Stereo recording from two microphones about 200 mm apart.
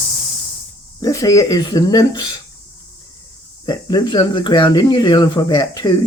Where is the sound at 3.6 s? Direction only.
20° left (ahead or behind).